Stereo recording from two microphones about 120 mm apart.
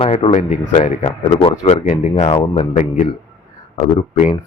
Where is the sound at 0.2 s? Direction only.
55° left (ahead or behind).